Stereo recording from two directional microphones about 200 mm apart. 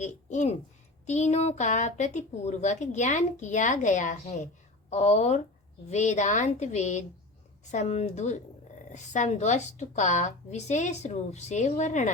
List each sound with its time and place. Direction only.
0.0 s a woman's voice: 35° left (ahead or behind)